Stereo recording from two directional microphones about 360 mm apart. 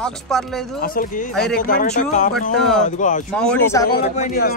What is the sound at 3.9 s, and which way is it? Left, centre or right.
Speech, left.